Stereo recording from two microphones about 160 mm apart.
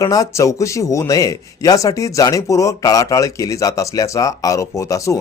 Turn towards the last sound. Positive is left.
turn(degrees=20)  # may be behind; listen again after turning